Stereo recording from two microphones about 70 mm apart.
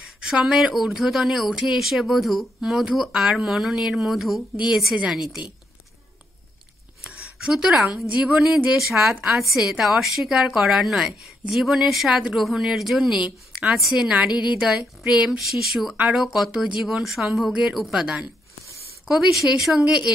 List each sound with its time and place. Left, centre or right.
0.2 s speech: centre
7.0 s a sound: centre
8.2 s speech: centre